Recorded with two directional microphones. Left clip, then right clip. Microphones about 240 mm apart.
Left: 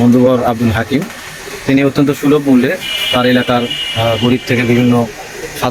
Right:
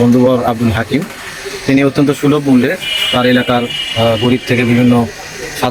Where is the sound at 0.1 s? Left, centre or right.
Centre.